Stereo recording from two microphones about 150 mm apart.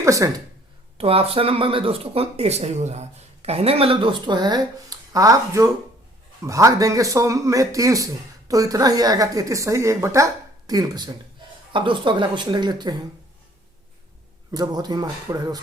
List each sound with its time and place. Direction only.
0.0 s a man's voice: 20° right (ahead or behind)
0.9 s a man's voice: 40° right (ahead or behind)
14.5 s a man's voice: 25° right (ahead or behind)